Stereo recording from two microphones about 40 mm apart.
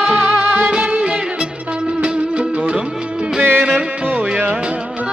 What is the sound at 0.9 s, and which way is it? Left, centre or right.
Music, right.